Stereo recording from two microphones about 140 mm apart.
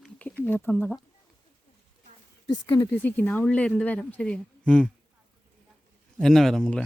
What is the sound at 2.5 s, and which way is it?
Speech, 30° left (ahead or behind).